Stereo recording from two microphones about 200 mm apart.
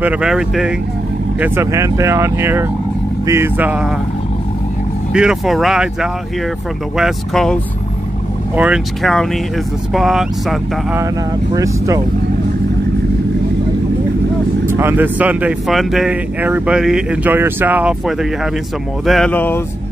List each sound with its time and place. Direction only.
0.0 s speech: 5° right (ahead or behind)
5.1 s speech: 5° right (ahead or behind)
8.5 s speech: 5° right (ahead or behind)
11.5 s speech: 15° right (ahead or behind)
14.7 s speech: 10° right (ahead or behind); by 19.6 s 10° left (ahead or behind)